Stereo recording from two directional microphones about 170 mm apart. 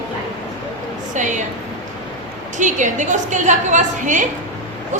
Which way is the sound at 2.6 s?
45° right (ahead or behind).